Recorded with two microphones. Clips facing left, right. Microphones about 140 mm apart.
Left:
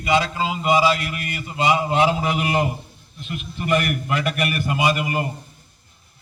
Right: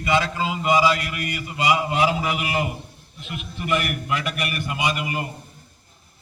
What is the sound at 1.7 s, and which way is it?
A man's voice, 30° left (ahead or behind).